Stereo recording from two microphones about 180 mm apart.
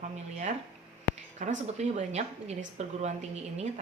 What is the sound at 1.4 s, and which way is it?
A woman's voice, 40° right (ahead or behind).